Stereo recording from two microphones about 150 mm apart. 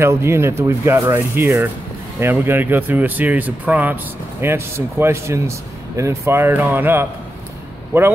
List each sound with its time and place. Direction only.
0.0 s speech: 15° right (ahead or behind)